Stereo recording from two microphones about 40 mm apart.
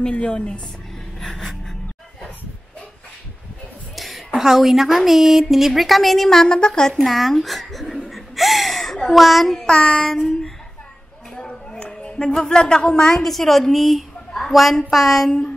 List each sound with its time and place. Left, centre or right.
0.1 s a woman's voice: left
1.2 s gasp: centre
3.9 s a sound: centre
4.4 s a woman's voice: centre
7.0 s a child's voice: centre
8.1 s a sound: centre
9.7 s a woman's voice: left
10.0 s a sound: centre
13.1 s a woman's voice: centre